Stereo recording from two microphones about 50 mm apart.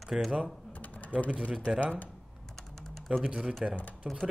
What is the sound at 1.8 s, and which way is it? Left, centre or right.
Speech, left.